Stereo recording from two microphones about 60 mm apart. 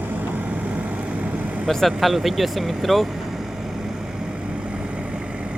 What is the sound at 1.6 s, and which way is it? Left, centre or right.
Speech, centre.